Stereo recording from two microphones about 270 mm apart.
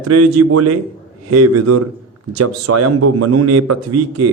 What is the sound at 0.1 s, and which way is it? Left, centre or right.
A man's voice, right.